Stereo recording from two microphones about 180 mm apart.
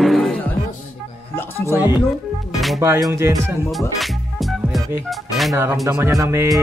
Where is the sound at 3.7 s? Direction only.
Centre (ahead or behind).